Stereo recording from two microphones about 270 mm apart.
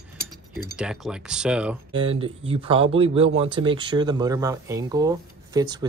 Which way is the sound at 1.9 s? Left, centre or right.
Centre.